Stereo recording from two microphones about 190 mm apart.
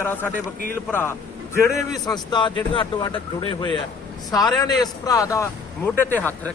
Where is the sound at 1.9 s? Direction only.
20° left (ahead or behind).